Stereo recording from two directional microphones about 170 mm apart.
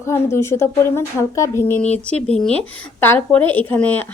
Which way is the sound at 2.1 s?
40° right (ahead or behind).